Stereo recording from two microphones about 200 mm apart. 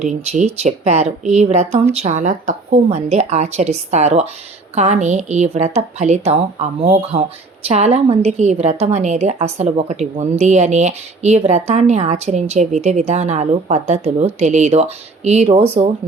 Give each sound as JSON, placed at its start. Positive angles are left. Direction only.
{"t": 0.0, "sound": "a woman's voice", "side_deg": -35}